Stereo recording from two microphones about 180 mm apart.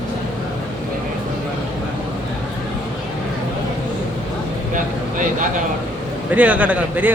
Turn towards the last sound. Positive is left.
turn(degrees=-10)  # may be behind; listen again after turning